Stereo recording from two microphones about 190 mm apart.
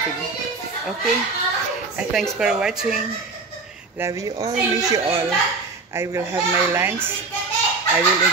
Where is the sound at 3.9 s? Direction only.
15° right (ahead or behind).